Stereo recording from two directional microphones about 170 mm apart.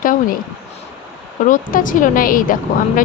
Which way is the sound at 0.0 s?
55° left (ahead or behind).